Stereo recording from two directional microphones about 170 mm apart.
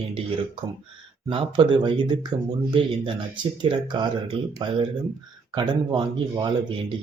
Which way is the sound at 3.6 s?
25° right (ahead or behind).